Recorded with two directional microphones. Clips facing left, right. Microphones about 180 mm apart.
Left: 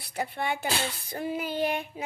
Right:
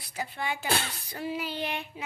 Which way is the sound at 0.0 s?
60° left (ahead or behind).